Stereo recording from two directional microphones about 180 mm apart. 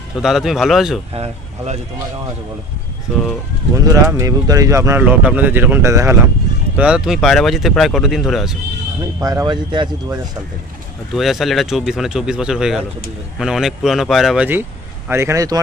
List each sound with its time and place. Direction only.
0.1 s speech: centre (ahead or behind)
1.1 s speech: 35° right (ahead or behind)
3.7 s speech: 15° right (ahead or behind)
6.8 s speech: 5° right (ahead or behind)
9.2 s speech: 20° right (ahead or behind)
11.1 s speech: centre (ahead or behind); by 15.6 s 20° right (ahead or behind)